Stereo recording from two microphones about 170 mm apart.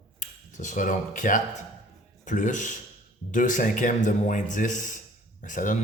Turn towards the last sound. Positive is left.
turn(degrees=50)  # may be behind; listen again after turning